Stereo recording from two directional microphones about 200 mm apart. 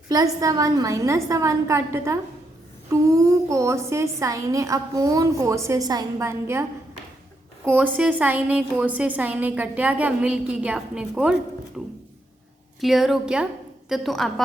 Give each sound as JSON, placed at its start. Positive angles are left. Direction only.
{"t": 0.1, "sound": "a woman's voice", "side_deg": -20}